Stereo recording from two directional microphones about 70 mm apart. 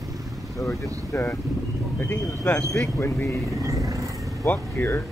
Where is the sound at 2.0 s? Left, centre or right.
Left.